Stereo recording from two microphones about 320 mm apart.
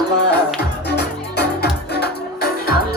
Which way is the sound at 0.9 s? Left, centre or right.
Left.